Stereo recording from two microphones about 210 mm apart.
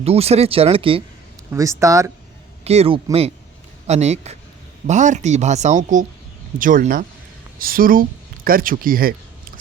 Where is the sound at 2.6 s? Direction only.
30° right (ahead or behind).